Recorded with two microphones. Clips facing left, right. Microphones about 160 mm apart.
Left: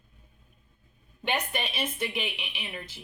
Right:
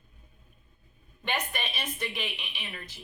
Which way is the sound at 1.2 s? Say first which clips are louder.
Left 3 dB; 15° left (ahead or behind).